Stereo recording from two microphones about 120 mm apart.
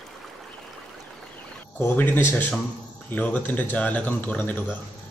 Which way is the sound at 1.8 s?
15° left (ahead or behind).